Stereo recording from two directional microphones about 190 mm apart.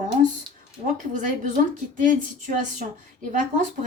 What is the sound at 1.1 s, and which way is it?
A woman's voice, 40° right (ahead or behind).